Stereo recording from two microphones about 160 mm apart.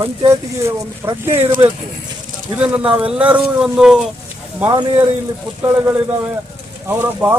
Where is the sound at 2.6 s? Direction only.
10° right (ahead or behind).